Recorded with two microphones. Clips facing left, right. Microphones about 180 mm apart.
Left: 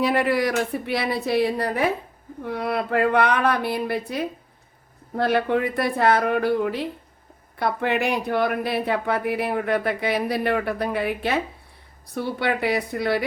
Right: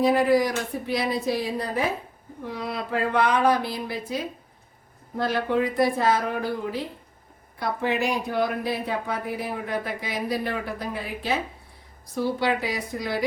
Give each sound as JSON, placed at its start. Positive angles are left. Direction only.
{"t": 0.0, "sound": "speech", "side_deg": 65}